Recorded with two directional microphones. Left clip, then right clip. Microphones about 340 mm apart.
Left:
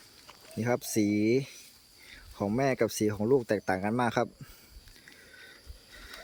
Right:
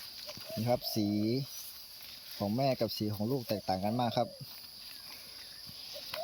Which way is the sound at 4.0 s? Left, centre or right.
Left.